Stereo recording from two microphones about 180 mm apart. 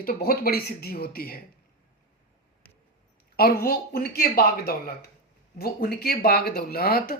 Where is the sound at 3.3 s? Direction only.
60° left (ahead or behind).